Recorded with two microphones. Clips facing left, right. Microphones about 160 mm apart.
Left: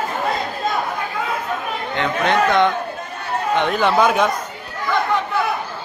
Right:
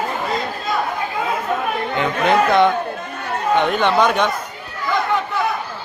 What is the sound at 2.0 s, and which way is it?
A man's voice, 5° right (ahead or behind).